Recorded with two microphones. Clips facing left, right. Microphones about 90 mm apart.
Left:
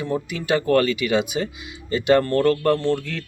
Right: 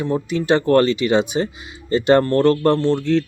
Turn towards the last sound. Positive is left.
turn(degrees=-25)  # may be behind; listen again after turning